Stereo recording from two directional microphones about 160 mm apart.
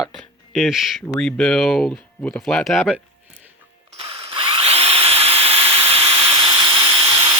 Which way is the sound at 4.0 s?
35° right (ahead or behind).